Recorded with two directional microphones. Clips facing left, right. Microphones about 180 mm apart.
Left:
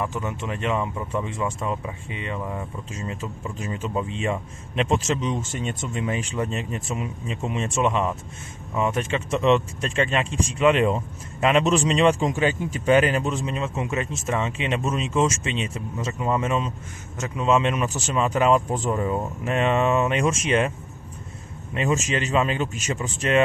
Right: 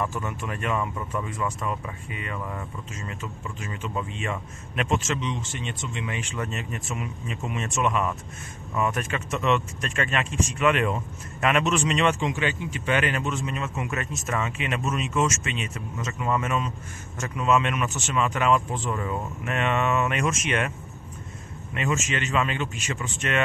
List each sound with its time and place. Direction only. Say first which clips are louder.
0.0 s speech: left 2 dB; 15° left (ahead or behind)
2.9 s a man's voice: left 4 dB; 30° left (ahead or behind)
21.7 s a man's voice: left 4 dB; 35° left (ahead or behind)